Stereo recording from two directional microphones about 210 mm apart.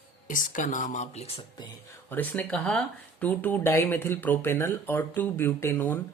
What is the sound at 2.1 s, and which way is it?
Speech, 10° left (ahead or behind).